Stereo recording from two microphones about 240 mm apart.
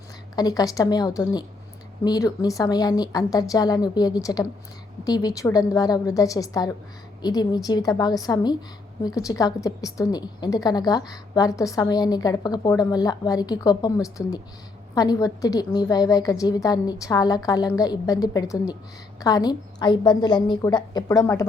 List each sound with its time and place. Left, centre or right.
0.3 s a woman's voice: centre